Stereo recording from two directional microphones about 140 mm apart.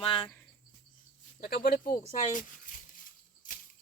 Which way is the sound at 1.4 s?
90° left.